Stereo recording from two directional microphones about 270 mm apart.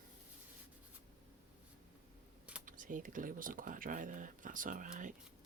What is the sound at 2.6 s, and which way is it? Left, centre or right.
Speech, right.